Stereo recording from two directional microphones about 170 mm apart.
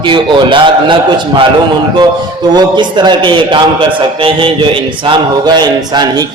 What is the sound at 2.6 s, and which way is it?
A man's voice, 25° right (ahead or behind).